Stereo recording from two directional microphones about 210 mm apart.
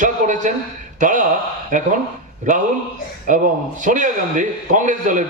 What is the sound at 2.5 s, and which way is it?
A man's voice, 35° right (ahead or behind).